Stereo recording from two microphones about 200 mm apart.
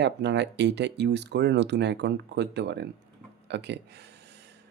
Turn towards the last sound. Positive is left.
turn(degrees=-60)  # may be behind; listen again after turning